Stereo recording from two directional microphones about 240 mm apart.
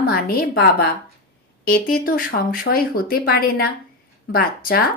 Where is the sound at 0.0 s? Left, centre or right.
Left.